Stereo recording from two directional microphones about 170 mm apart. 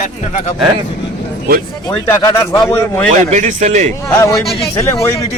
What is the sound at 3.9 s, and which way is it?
Speech, 15° left (ahead or behind).